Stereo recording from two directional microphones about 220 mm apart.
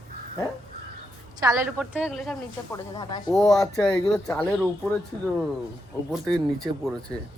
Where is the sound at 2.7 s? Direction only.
20° left (ahead or behind).